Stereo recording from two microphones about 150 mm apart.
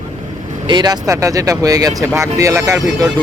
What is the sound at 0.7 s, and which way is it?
Speech, 30° right (ahead or behind).